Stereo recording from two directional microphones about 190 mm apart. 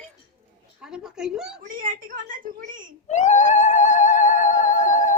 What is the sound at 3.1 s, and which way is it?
Cat, 40° left (ahead or behind).